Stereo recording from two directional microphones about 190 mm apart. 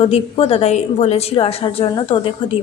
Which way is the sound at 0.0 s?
30° left (ahead or behind).